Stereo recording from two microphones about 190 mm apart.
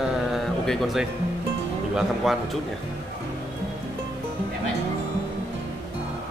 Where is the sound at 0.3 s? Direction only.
Centre (ahead or behind).